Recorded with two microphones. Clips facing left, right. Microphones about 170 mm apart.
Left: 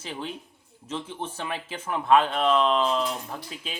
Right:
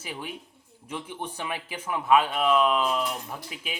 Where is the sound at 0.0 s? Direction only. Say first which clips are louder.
Left 2 dB; 10° right (ahead or behind).